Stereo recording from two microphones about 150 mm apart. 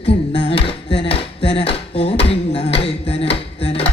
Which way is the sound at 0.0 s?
40° left (ahead or behind).